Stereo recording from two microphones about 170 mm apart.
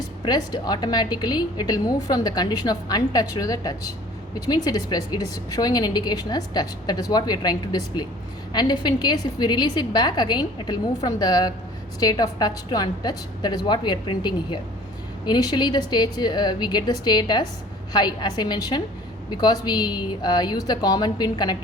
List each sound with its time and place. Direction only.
0.3 s a woman's voice: 25° left (ahead or behind)